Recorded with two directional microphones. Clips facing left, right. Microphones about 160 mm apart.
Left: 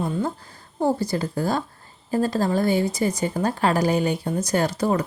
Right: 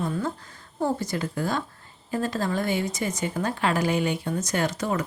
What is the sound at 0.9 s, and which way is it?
A woman's voice, 35° left (ahead or behind).